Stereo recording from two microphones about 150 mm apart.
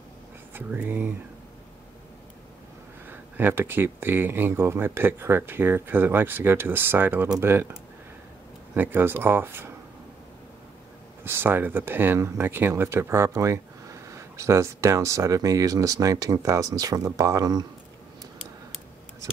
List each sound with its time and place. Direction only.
0.5 s speech: 10° right (ahead or behind)
3.1 s speech: 15° right (ahead or behind)
8.7 s speech: 15° right (ahead or behind)
11.2 s speech: 15° right (ahead or behind)